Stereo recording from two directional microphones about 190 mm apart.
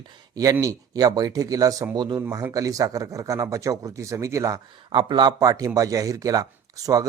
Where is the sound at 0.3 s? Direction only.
15° right (ahead or behind).